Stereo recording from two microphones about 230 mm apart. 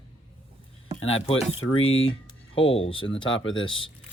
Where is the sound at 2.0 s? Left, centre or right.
Left.